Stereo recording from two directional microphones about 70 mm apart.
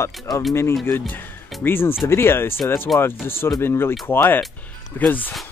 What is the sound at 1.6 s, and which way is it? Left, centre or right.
Speech, left.